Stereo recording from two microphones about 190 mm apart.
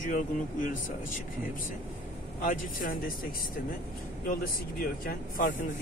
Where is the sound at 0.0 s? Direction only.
45° left (ahead or behind).